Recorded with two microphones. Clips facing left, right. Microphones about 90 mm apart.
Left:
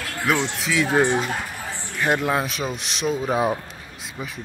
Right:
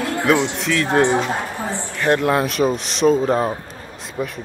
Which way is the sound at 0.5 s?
Centre (ahead or behind).